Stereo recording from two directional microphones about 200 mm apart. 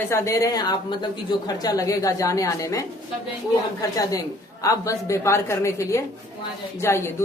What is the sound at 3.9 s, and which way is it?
A man's voice, 15° left (ahead or behind).